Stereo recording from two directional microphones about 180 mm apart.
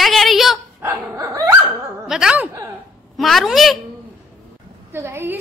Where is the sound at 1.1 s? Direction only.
20° right (ahead or behind).